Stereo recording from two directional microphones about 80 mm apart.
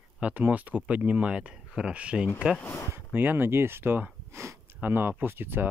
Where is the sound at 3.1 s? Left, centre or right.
Right.